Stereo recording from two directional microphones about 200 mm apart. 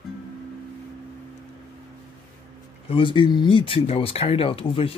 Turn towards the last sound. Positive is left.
turn(degrees=30)  # may be behind; listen again after turning